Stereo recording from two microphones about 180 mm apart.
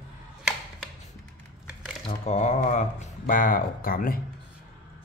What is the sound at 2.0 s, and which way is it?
Speech, 40° left (ahead or behind).